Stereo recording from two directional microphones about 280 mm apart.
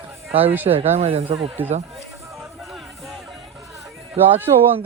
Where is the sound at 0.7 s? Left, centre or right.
Right.